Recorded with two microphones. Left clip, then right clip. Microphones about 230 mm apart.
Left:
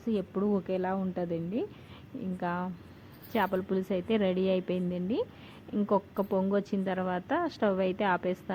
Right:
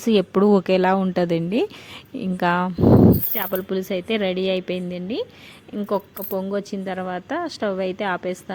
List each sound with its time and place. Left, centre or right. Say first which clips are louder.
0.0 s speech: right 14 dB; right
3.3 s a woman's voice: right 4 dB; right